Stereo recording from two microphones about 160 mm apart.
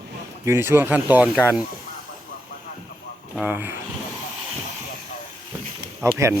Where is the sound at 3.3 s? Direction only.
10° right (ahead or behind).